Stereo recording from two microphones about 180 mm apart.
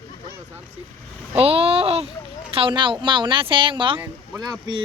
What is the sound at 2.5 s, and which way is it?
Speech, 30° right (ahead or behind).